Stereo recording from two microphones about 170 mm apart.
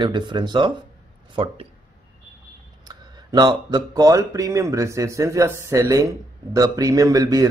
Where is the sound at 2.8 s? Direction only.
20° right (ahead or behind).